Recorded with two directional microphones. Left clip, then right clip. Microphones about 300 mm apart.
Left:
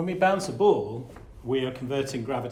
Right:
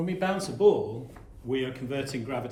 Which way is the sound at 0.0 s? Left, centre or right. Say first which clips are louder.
Left 6 dB; centre.